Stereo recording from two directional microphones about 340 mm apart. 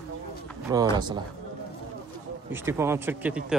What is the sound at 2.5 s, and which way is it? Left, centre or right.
Speech, centre.